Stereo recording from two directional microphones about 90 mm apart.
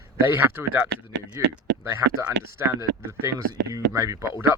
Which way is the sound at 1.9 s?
35° right (ahead or behind).